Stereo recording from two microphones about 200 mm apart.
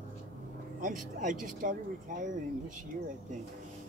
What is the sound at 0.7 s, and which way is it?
Speech, 40° right (ahead or behind).